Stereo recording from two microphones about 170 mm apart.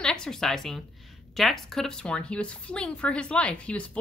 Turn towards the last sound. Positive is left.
turn(degrees=5)  # may be behind; listen again after turning